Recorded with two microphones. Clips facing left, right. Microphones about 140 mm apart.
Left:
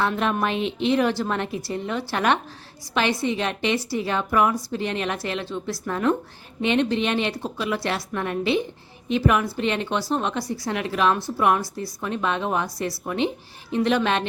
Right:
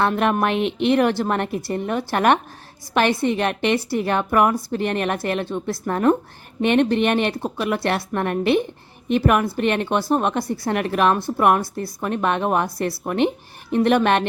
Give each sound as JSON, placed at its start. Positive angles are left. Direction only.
{"t": 0.0, "sound": "a woman's voice", "side_deg": -55}